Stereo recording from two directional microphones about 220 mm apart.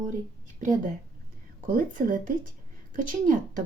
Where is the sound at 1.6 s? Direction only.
35° right (ahead or behind).